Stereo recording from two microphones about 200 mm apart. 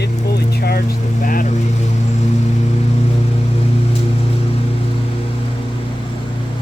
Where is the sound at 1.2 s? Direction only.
40° left (ahead or behind).